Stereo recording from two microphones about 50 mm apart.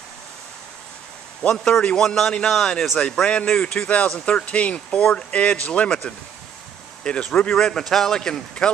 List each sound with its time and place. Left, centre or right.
1.6 s a man's voice: centre